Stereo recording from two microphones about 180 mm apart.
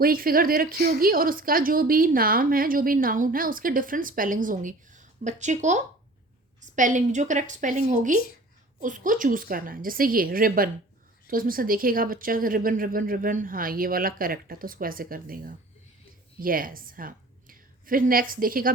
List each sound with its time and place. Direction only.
0.0 s a woman's voice: 55° right (ahead or behind)